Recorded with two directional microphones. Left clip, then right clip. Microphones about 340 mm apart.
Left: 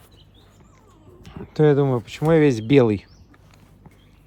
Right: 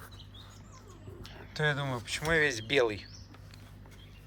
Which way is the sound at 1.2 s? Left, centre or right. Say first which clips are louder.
Left 13 dB; centre.